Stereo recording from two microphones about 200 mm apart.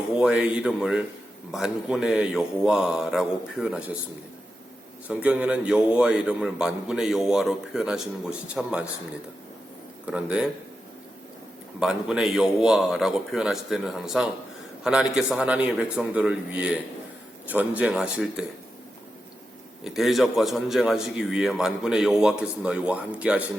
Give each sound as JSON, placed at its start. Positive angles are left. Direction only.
{"t": 0.2, "sound": "a man's voice", "side_deg": -5}
{"t": 5.0, "sound": "a man's voice", "side_deg": -5}
{"t": 10.1, "sound": "a man's voice", "side_deg": -5}
{"t": 11.8, "sound": "a man's voice", "side_deg": -5}
{"t": 19.8, "sound": "a man's voice", "side_deg": 0}